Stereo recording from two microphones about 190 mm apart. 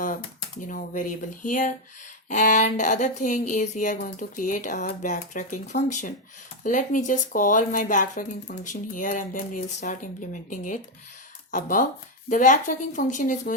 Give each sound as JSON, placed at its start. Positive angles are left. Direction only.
{"t": 0.7, "sound": "speech", "side_deg": 45}